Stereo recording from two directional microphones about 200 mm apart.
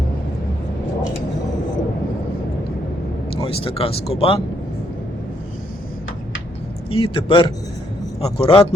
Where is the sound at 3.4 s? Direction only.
30° left (ahead or behind).